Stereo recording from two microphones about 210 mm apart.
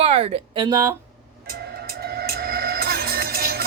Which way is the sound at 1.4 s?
45° right (ahead or behind).